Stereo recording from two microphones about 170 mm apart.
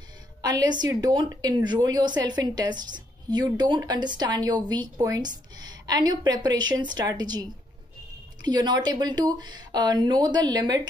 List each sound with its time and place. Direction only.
0.4 s a woman's voice: 20° right (ahead or behind)